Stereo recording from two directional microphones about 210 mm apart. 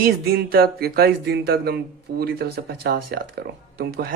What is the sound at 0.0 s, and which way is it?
Speech, 45° right (ahead or behind).